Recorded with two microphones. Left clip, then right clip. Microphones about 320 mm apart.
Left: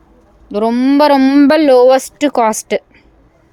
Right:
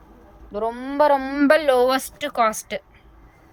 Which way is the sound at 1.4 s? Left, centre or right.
Centre.